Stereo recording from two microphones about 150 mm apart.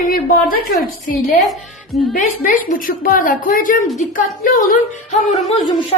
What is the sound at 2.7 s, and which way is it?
A woman's voice, 70° left (ahead or behind).